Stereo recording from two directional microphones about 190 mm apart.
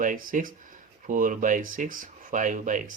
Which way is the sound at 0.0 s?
45° right (ahead or behind).